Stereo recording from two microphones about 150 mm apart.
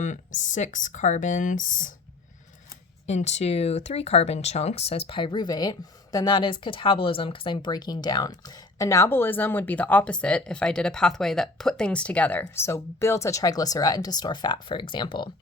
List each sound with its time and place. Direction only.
0.0 s speech: 55° left (ahead or behind)
3.1 s speech: 50° left (ahead or behind); by 15.3 s 30° left (ahead or behind)